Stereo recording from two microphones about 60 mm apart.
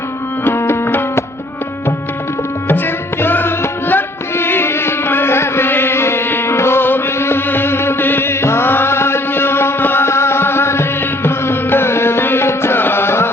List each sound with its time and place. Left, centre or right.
0.4 s music: left
2.6 s music: left